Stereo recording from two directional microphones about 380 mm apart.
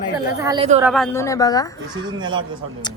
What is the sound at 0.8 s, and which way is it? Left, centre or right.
Speech, centre.